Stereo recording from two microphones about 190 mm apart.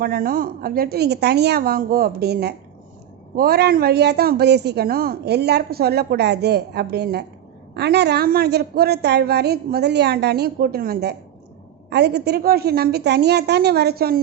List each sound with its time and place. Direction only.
0.0 s a woman's voice: 50° right (ahead or behind)